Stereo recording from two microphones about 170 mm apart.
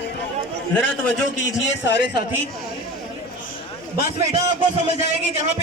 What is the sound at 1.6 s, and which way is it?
Speech, 90° left.